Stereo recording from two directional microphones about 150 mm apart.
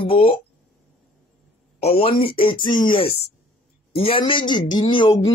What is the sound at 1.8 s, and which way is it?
Speech, 40° left (ahead or behind).